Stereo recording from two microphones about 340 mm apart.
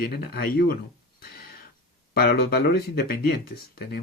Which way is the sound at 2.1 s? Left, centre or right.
Left.